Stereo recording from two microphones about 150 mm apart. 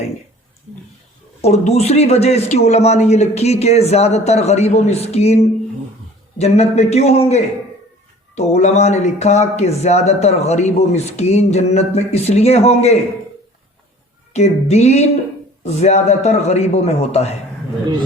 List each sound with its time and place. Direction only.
1.4 s speech: 45° left (ahead or behind)
14.3 s speech: 45° left (ahead or behind)